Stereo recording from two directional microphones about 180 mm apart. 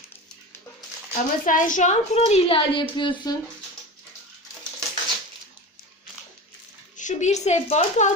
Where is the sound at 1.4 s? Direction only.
50° left (ahead or behind); by 3.3 s 25° left (ahead or behind).